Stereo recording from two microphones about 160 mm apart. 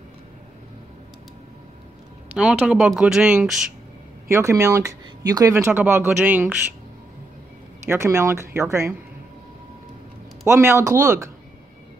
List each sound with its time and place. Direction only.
2.3 s speech: 5° right (ahead or behind)
4.3 s speech: 15° right (ahead or behind)
7.8 s speech: 15° right (ahead or behind)
10.4 s speech: 15° right (ahead or behind)